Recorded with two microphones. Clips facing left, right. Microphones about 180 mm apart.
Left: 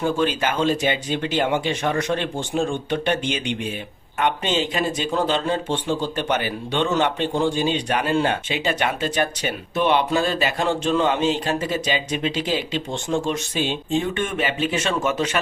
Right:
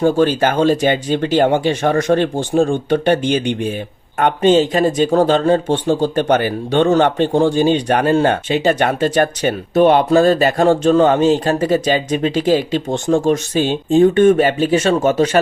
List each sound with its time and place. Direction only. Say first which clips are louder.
0.0 s speech: right 8 dB; 40° right (ahead or behind)